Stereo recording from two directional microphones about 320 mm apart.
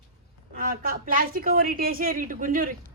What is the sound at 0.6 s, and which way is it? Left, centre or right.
A woman's voice, right.